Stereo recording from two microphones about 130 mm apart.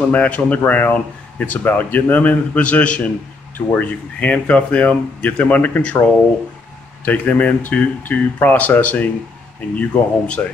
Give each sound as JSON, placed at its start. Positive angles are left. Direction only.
{"t": 0.1, "sound": "speech", "side_deg": 10}
{"t": 7.1, "sound": "speech", "side_deg": 10}